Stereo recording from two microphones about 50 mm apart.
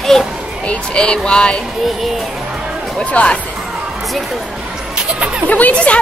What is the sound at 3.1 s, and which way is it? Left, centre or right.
Speech, left.